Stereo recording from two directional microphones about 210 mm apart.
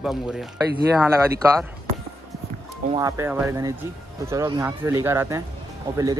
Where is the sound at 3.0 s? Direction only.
15° right (ahead or behind).